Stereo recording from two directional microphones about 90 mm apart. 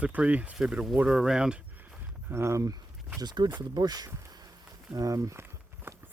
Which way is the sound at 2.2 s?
30° right (ahead or behind).